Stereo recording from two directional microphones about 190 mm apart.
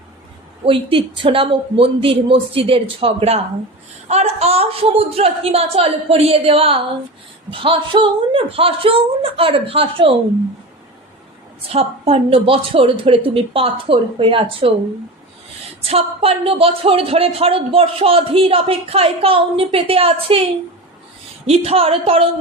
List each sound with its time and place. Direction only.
0.6 s a woman's voice: 30° right (ahead or behind)
11.7 s speech: 30° right (ahead or behind)
15.8 s a woman's voice: 30° right (ahead or behind)